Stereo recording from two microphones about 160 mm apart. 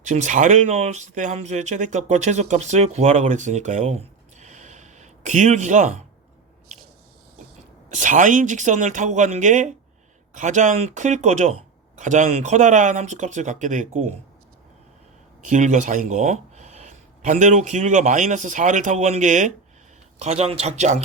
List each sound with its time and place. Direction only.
0.0 s speech: 50° right (ahead or behind)
7.9 s speech: 55° right (ahead or behind)
15.4 s speech: 50° right (ahead or behind)